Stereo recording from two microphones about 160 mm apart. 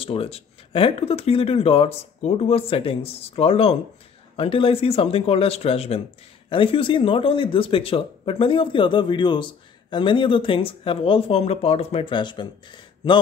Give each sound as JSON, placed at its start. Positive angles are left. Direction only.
{"t": 0.0, "sound": "speech", "side_deg": 35}